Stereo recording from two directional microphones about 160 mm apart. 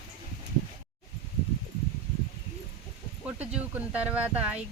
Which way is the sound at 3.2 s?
10° right (ahead or behind).